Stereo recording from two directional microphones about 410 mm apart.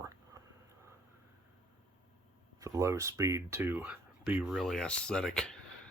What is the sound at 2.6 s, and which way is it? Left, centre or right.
Speech, centre.